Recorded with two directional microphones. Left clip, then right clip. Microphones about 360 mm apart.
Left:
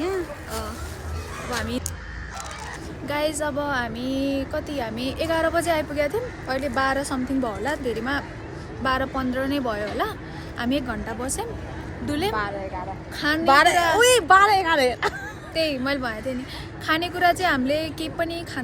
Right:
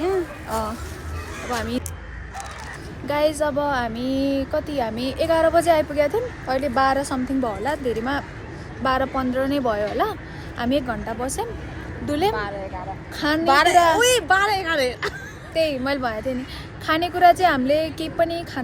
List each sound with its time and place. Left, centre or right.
1.5 s speech: centre
3.1 s speech: centre
12.3 s a woman's voice: centre
13.1 s speech: centre
13.5 s a woman's voice: centre
13.7 s speech: centre
14.0 s speech: centre
15.5 s speech: centre